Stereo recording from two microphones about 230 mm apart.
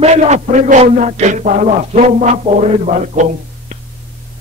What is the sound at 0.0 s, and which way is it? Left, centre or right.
A man's voice, right.